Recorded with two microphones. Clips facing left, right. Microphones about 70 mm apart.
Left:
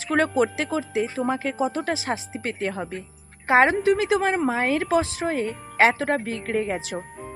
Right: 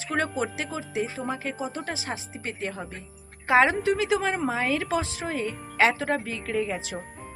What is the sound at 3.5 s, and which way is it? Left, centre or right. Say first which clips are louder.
Speech: left 2 dB; left.